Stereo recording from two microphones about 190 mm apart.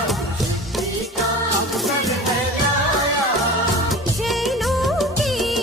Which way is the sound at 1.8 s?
Centre (ahead or behind).